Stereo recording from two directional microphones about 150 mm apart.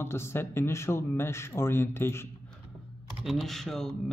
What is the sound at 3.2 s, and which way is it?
Speech, centre (ahead or behind).